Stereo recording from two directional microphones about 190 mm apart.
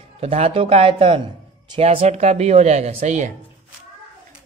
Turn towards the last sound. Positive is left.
turn(degrees=-40)  # may be behind; listen again after turning